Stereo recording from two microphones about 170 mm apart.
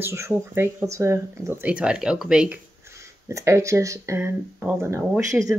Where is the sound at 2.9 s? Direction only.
15° right (ahead or behind).